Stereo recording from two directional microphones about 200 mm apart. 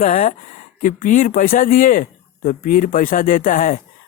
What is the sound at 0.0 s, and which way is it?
Speech, 40° left (ahead or behind).